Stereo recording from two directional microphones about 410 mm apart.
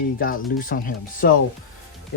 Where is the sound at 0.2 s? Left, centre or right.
Left.